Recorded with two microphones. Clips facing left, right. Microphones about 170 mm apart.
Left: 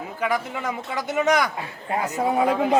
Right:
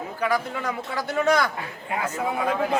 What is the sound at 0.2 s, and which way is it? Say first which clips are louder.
A man's voice: even; 20° left (ahead or behind).